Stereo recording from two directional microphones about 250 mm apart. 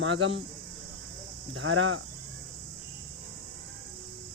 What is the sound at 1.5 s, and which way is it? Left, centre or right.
Cricket, right.